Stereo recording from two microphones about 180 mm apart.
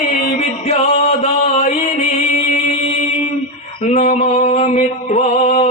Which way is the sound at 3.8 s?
35° left (ahead or behind).